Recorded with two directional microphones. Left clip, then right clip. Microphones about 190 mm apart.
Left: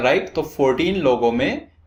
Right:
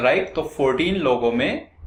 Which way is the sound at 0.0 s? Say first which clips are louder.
Left 1 dB; 45° left (ahead or behind).